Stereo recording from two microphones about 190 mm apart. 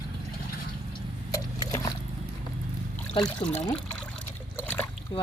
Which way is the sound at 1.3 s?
15° left (ahead or behind).